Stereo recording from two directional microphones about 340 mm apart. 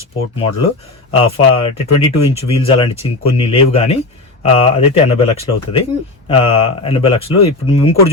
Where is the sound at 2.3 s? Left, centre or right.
Centre.